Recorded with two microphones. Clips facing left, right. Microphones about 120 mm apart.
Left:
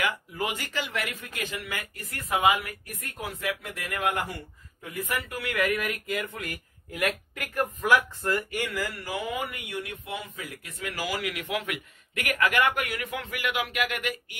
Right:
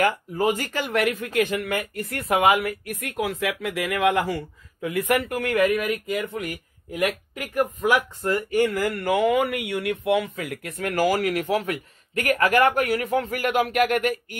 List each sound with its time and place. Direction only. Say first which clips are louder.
0.0 s speech: right 8 dB; 40° right (ahead or behind)
2.1 s speech: right 5 dB; 70° right (ahead or behind); by 5.6 s 50° right (ahead or behind)
5.6 s speech: right 5 dB; 20° right (ahead or behind)
8.5 s speech: right 10 dB; 50° right (ahead or behind)